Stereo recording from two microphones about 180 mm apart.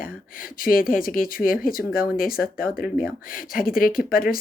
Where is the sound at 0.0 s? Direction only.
50° left (ahead or behind).